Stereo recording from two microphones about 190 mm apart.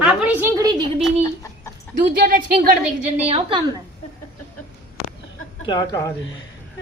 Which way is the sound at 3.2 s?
30° right (ahead or behind).